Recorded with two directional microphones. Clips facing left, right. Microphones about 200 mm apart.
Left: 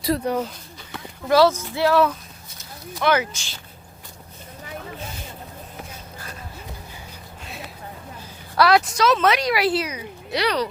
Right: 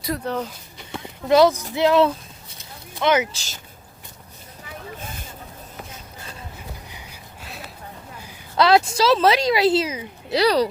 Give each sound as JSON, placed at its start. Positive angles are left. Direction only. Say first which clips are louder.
{"t": 0.2, "sound": "speech", "louder": "even", "side_deg": 15}
{"t": 0.8, "sound": "a sound", "louder": "right 3 dB", "side_deg": -20}
{"t": 1.7, "sound": "speech", "louder": "right 2 dB", "side_deg": -20}
{"t": 3.3, "sound": "a woman's voice", "louder": "even", "side_deg": -40}
{"t": 8.2, "sound": "a woman's voice", "louder": "even", "side_deg": -25}